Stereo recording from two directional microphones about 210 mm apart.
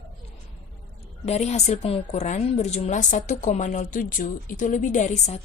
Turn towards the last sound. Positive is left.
turn(degrees=35)  # may be behind; listen again after turning